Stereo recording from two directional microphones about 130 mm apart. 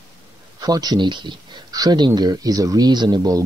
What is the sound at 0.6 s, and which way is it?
Speech, 30° right (ahead or behind).